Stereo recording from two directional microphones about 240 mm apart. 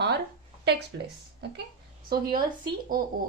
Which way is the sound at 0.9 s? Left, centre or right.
Right.